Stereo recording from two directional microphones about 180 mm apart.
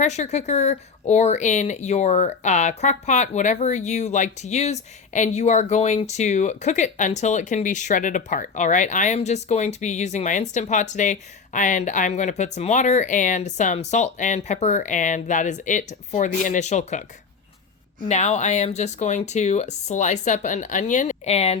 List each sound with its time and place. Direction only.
0.0 s speech: 40° left (ahead or behind)
18.1 s speech: 40° left (ahead or behind)